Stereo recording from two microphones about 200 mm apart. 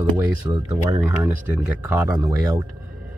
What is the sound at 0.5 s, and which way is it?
Speech, 20° right (ahead or behind).